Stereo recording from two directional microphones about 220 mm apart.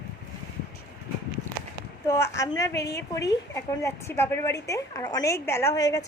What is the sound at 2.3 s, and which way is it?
A woman's voice, 15° left (ahead or behind).